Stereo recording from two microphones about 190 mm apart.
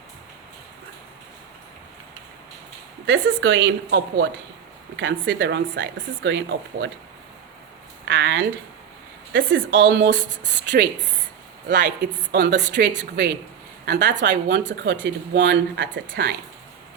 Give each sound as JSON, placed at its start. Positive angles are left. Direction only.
{"t": 3.1, "sound": "a woman's voice", "side_deg": -85}
{"t": 8.0, "sound": "a woman's voice", "side_deg": -70}